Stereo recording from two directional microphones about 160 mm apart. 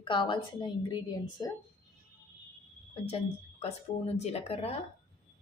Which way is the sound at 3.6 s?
45° left (ahead or behind).